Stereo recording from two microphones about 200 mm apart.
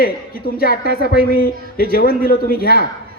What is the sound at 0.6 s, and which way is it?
A man's voice, 50° left (ahead or behind).